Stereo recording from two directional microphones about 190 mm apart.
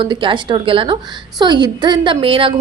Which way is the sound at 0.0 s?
25° right (ahead or behind).